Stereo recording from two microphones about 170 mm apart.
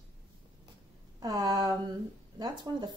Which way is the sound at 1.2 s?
20° right (ahead or behind).